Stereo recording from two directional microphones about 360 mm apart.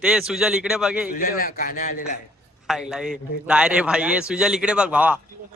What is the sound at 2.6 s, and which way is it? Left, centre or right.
A man's voice, centre.